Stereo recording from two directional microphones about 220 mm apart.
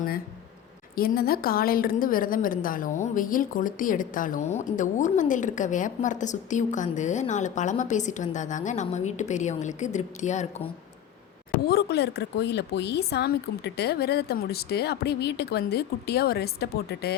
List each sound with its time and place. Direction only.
0.9 s a woman's voice: 45° left (ahead or behind)
11.7 s speech: 45° left (ahead or behind)